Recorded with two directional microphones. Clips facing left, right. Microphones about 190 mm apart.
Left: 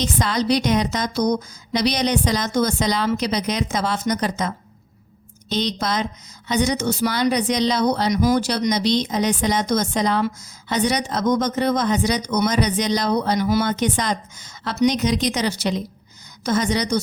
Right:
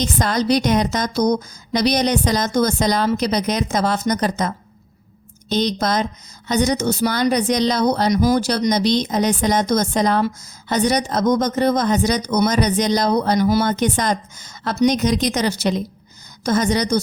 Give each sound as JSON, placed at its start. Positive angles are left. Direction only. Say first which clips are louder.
{"t": 0.0, "sound": "speech", "louder": "right 2 dB", "side_deg": -45}